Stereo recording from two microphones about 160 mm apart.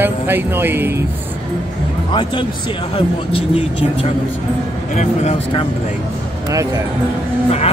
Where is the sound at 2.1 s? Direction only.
30° left (ahead or behind).